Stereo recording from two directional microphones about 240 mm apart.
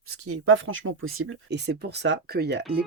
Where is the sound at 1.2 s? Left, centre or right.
Right.